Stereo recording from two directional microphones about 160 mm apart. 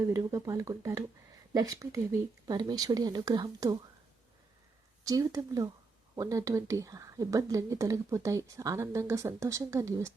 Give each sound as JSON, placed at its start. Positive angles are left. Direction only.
{"t": 0.0, "sound": "speech", "side_deg": -20}
{"t": 5.0, "sound": "speech", "side_deg": -20}